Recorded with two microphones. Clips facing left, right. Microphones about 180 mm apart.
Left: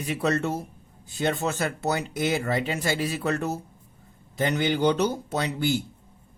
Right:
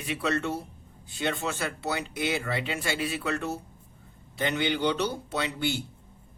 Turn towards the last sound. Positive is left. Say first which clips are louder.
# left 4 dB
turn(degrees=40)  # may be behind; listen again after turning